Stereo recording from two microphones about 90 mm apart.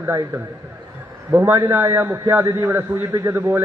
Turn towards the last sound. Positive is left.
turn(degrees=-25)  # may be behind; listen again after turning